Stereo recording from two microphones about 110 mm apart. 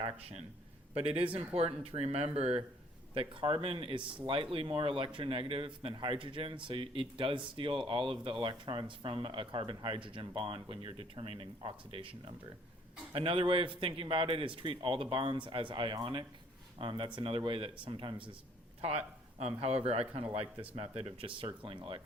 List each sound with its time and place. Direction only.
0.0 s speech: 60° right (ahead or behind)
3.2 s a man's voice: 50° right (ahead or behind)
19.4 s a man's voice: 65° right (ahead or behind); by 22.0 s 50° right (ahead or behind)